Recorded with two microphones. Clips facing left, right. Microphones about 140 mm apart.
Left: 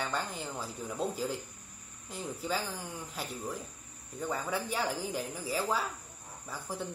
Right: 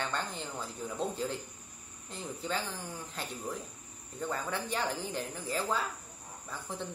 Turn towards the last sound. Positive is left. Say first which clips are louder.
# left 1 dB
turn(degrees=5)  # may be behind; listen again after turning